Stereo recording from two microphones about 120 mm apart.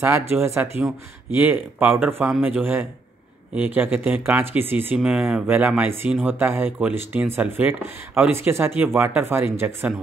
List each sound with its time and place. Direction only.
0.0 s speech: 20° right (ahead or behind)